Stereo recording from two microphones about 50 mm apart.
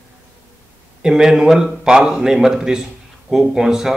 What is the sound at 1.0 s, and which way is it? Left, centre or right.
Speech, centre.